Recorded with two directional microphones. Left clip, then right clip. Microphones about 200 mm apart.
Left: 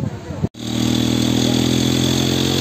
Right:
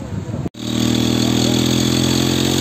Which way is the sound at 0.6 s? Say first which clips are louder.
Right 2 dB; 55° right (ahead or behind).